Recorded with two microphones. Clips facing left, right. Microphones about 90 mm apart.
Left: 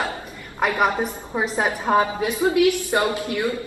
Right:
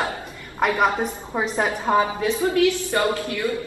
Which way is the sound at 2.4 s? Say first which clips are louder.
Left 3 dB; 20° left (ahead or behind).